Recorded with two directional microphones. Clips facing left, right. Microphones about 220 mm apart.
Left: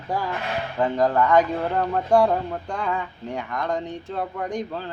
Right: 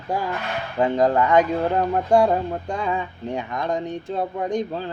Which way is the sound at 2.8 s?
20° right (ahead or behind).